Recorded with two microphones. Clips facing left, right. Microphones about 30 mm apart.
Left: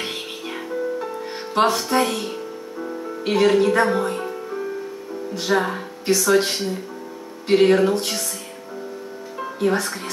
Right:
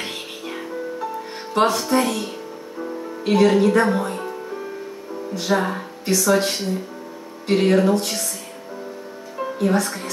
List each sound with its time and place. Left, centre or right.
0.0 s music: centre
2.8 s speech: centre
9.4 s speech: centre